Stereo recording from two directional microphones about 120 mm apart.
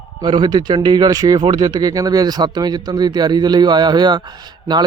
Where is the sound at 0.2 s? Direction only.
35° right (ahead or behind).